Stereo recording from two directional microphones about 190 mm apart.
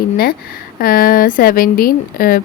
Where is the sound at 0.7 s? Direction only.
50° left (ahead or behind).